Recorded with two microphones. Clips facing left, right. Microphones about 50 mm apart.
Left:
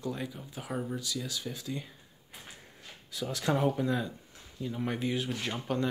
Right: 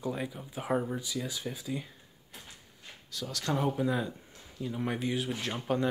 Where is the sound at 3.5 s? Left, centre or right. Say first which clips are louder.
Right 1 dB; centre.